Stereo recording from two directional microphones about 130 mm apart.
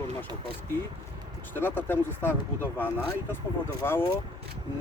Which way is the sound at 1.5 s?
15° left (ahead or behind).